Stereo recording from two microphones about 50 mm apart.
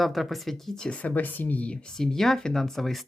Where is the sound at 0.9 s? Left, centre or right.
Left.